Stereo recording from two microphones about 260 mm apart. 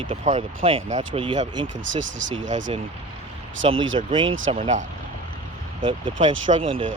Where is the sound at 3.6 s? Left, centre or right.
Right.